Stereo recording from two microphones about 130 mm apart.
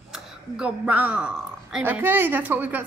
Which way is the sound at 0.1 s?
10° right (ahead or behind).